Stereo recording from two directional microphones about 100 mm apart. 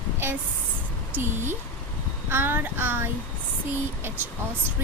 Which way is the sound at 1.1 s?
20° right (ahead or behind).